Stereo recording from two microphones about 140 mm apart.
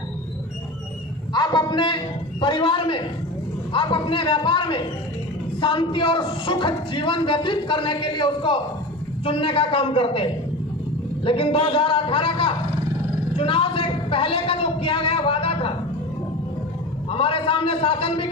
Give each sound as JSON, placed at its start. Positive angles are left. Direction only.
{"t": 1.3, "sound": "a sound", "side_deg": 30}
{"t": 2.4, "sound": "a man's voice", "side_deg": 35}
{"t": 17.1, "sound": "a man's voice", "side_deg": 40}